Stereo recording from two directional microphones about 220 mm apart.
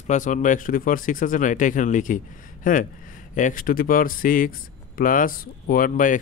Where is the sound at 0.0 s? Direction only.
35° left (ahead or behind).